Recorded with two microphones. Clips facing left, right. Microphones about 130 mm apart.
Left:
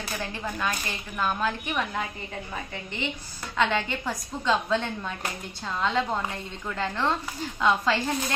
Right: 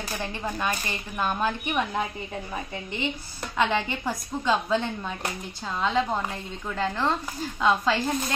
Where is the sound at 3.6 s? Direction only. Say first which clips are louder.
Right 1 dB; 15° right (ahead or behind).